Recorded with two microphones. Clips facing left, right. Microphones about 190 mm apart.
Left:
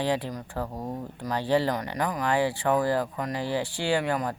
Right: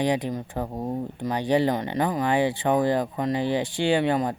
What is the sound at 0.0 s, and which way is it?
Speech, 20° right (ahead or behind).